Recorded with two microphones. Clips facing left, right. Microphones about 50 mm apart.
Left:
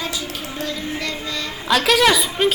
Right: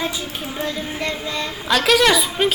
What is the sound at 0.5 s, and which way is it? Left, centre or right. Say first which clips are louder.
Child singing: right 1 dB; right.